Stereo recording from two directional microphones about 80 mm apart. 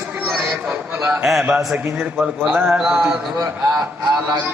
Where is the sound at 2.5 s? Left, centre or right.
Right.